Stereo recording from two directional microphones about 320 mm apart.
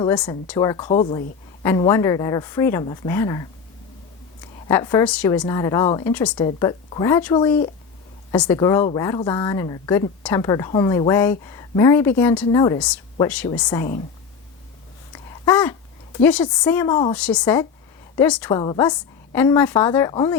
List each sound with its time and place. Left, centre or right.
0.0 s a woman's voice: centre
4.7 s a woman's voice: centre
15.1 s a sound: centre
16.1 s a woman's voice: centre